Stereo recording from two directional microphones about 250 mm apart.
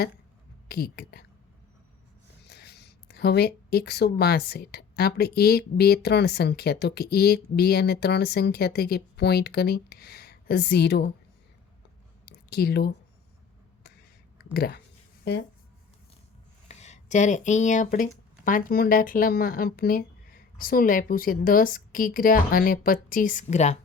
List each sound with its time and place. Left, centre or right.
0.7 s speech: left
2.5 s speech: left
12.2 s clicking: left
14.5 s speech: left
16.6 s speech: left